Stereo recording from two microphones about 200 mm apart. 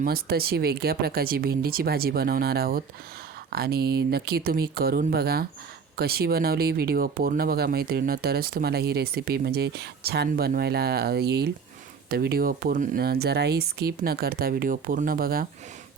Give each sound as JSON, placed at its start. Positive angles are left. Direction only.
{"t": 0.0, "sound": "speech", "side_deg": -50}